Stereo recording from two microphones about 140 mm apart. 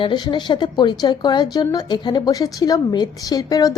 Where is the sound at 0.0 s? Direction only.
35° left (ahead or behind).